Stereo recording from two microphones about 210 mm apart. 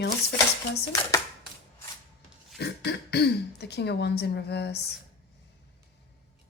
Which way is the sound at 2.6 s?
50° left (ahead or behind).